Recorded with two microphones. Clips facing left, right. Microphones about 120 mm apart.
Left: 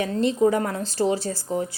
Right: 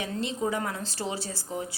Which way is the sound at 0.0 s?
45° left (ahead or behind).